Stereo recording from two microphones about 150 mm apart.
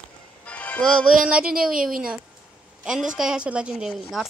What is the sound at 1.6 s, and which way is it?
Speech, 70° right (ahead or behind).